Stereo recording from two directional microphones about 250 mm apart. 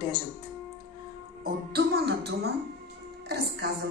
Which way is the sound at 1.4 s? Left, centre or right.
Right.